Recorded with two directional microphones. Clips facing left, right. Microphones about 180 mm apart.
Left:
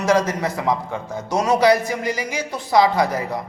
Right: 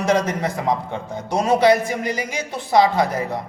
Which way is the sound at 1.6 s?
25° right (ahead or behind).